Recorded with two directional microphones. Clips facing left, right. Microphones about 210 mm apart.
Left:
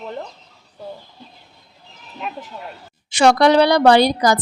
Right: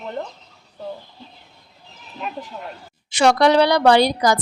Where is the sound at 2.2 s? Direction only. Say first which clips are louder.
Even; centre (ahead or behind).